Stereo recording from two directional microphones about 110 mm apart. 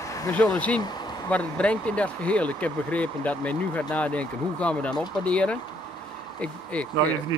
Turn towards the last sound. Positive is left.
turn(degrees=10)  # may be behind; listen again after turning